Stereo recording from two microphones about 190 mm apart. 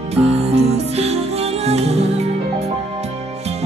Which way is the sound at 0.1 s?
35° right (ahead or behind).